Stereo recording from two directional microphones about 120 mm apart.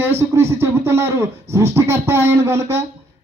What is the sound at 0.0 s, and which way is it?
Speech, 20° right (ahead or behind).